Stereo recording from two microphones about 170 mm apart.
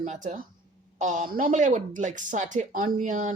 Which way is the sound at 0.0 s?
45° right (ahead or behind).